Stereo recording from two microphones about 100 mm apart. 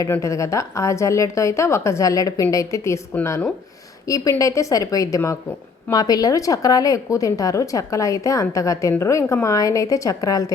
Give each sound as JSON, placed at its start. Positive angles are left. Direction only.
{"t": 0.1, "sound": "a woman's voice", "side_deg": 30}
{"t": 4.0, "sound": "a woman's voice", "side_deg": 35}